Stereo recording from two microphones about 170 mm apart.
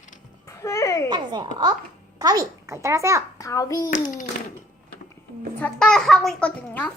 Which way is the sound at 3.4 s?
20° left (ahead or behind).